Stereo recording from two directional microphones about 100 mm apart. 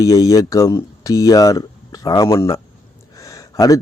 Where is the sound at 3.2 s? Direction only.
35° left (ahead or behind).